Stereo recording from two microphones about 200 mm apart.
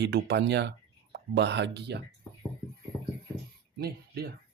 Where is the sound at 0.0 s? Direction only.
55° right (ahead or behind).